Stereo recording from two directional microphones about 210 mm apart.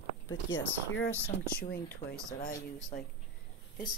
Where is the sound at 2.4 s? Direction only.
45° left (ahead or behind).